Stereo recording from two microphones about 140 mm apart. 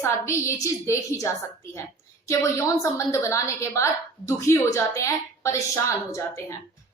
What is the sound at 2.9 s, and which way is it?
A woman's voice, 20° left (ahead or behind).